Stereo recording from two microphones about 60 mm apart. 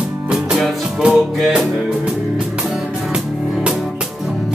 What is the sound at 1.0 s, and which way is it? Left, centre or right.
Music, centre.